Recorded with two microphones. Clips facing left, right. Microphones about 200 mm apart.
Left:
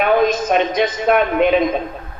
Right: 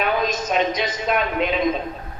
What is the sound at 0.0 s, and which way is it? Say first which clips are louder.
A woman's voice: left 7 dB; 55° left (ahead or behind).